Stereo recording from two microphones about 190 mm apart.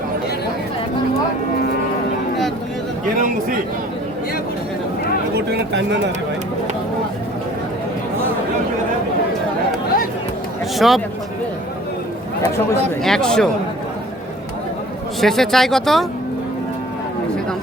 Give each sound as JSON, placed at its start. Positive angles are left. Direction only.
{"t": 3.2, "sound": "a man's voice", "side_deg": -45}
{"t": 5.3, "sound": "speech", "side_deg": -65}
{"t": 10.8, "sound": "speech", "side_deg": 0}
{"t": 13.0, "sound": "speech", "side_deg": 5}
{"t": 15.2, "sound": "speech", "side_deg": 0}